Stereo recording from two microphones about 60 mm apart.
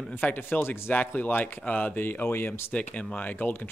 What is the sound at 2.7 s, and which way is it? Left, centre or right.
Speech, left.